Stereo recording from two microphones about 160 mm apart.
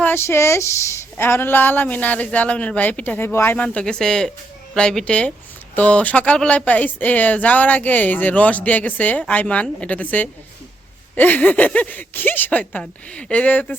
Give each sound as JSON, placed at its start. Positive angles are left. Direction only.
{"t": 0.0, "sound": "a woman's voice", "side_deg": 15}